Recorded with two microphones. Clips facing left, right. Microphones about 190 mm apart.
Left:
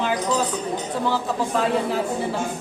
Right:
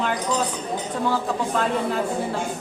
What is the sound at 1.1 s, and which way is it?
Speech, centre (ahead or behind).